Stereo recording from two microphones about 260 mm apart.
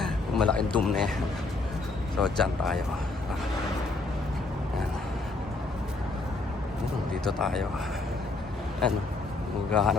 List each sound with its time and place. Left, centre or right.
0.0 s a man's voice: centre
2.1 s speech: centre
7.1 s speech: centre
9.7 s speech: centre